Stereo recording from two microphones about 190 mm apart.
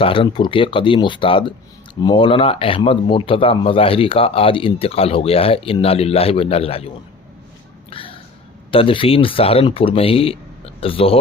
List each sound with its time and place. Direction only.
0.0 s speech: 25° left (ahead or behind)
7.9 s a sound: 30° left (ahead or behind)
8.7 s speech: 30° left (ahead or behind)